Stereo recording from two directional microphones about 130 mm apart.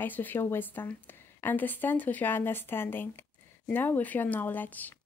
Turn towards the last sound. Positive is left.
turn(degrees=15)  # may be behind; listen again after turning